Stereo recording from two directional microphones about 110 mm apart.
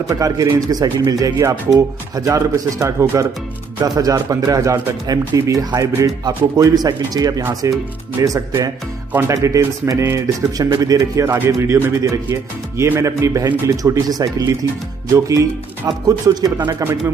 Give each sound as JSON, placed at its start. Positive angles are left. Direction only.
{"t": 0.1, "sound": "a man's voice", "side_deg": -30}